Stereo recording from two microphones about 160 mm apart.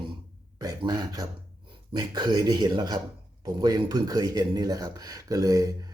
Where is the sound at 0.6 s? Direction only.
25° right (ahead or behind).